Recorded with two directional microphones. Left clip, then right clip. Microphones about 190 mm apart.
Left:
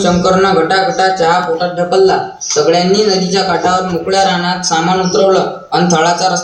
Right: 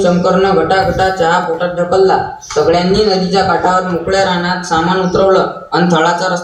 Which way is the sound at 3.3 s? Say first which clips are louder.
Right 3 dB; 50° left (ahead or behind).